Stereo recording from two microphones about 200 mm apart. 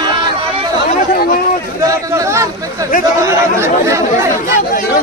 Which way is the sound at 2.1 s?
15° right (ahead or behind).